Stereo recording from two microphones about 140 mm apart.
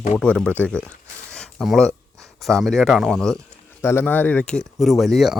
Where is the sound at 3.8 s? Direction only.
15° left (ahead or behind); by 5.4 s centre (ahead or behind).